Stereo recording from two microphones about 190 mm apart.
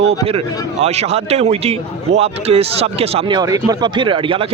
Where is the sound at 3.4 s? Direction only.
20° right (ahead or behind).